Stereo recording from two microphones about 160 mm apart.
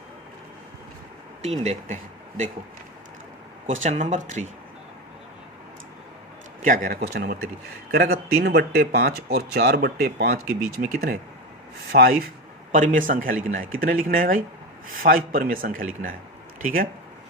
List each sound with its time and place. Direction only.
1.4 s speech: 45° right (ahead or behind)
3.7 s speech: 50° right (ahead or behind)
6.6 s speech: 60° right (ahead or behind)
7.9 s speech: 85° right
12.7 s speech: 55° right (ahead or behind)